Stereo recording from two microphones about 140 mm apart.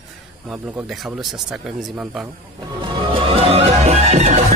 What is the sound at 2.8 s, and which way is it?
Music, 40° right (ahead or behind).